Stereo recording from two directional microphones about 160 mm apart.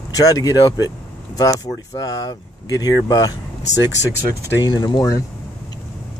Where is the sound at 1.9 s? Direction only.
20° left (ahead or behind).